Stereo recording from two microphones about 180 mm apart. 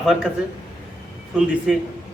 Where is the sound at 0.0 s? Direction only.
Centre (ahead or behind).